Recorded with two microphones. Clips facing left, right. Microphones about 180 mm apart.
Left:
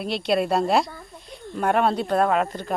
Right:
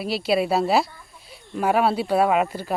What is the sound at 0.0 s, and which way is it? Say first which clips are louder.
Speech: right 1 dB; 5° right (ahead or behind).